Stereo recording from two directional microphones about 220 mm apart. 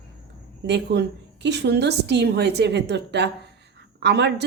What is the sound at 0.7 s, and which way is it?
A woman's voice, 50° right (ahead or behind).